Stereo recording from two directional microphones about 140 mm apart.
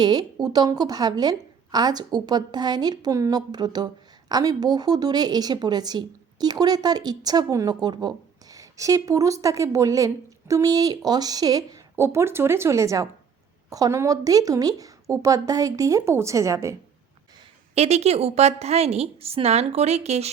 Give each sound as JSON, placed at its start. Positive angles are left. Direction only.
{"t": 0.0, "sound": "a woman's voice", "side_deg": -30}
{"t": 17.7, "sound": "a woman's voice", "side_deg": -50}